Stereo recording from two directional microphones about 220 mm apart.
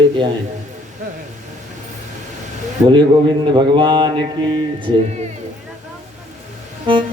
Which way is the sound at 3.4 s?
20° right (ahead or behind).